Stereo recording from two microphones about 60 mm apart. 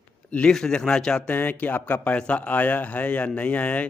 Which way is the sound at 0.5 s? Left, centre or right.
Centre.